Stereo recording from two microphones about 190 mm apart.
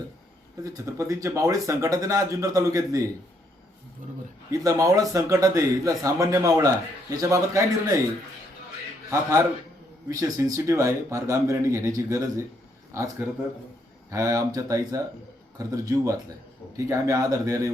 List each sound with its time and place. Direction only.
0.6 s speech: 15° right (ahead or behind)
4.5 s speech: 20° right (ahead or behind)
10.1 s speech: 15° right (ahead or behind)